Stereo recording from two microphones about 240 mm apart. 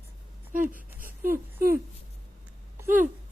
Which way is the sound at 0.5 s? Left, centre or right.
Right.